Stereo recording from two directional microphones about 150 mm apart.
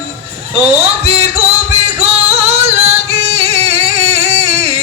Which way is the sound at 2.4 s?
45° right (ahead or behind).